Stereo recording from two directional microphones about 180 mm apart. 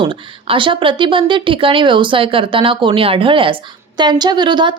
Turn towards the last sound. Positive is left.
turn(degrees=-25)  # may be behind; listen again after turning